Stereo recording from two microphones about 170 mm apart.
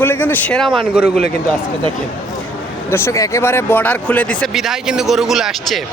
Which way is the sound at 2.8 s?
15° left (ahead or behind).